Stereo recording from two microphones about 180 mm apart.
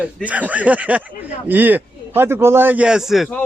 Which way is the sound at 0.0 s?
10° right (ahead or behind).